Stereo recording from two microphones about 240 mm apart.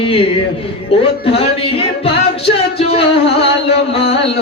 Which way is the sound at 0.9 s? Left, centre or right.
Left.